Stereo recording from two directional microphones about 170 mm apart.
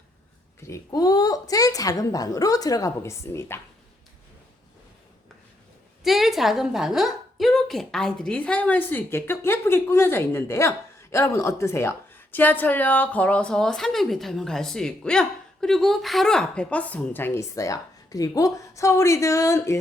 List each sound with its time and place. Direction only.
0.6 s a woman's voice: 20° left (ahead or behind)
6.0 s a woman's voice: centre (ahead or behind); by 19.8 s 15° left (ahead or behind)